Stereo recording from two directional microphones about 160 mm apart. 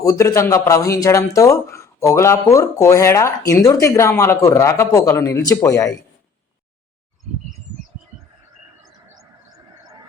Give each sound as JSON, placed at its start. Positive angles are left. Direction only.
{"t": 0.0, "sound": "speech", "side_deg": 20}